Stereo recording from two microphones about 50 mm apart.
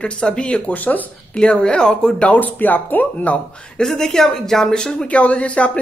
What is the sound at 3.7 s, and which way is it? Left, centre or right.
Speech, centre.